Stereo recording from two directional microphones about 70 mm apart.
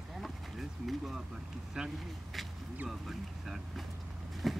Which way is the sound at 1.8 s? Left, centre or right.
Centre.